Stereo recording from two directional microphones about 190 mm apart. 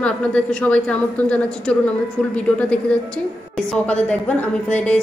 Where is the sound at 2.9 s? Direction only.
5° left (ahead or behind).